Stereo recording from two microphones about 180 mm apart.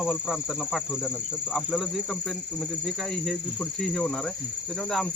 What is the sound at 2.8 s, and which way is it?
Insect, centre (ahead or behind).